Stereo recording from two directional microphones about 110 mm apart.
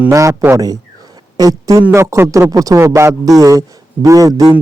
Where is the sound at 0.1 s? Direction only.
30° right (ahead or behind).